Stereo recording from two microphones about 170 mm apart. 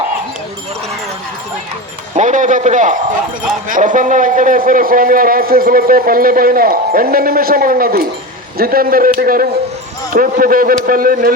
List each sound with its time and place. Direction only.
2.1 s a man's voice: 45° right (ahead or behind)